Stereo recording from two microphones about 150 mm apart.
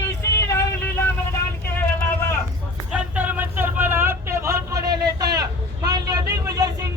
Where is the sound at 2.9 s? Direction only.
10° right (ahead or behind); by 6.7 s 25° right (ahead or behind).